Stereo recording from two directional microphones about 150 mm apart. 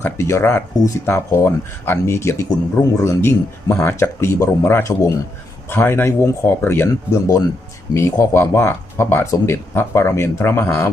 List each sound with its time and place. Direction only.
0.0 s speech: 20° left (ahead or behind)